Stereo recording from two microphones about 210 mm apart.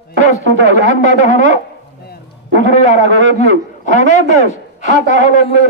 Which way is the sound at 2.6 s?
35° left (ahead or behind).